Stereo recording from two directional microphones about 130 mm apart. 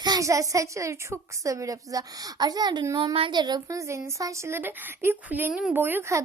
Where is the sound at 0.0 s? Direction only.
30° right (ahead or behind).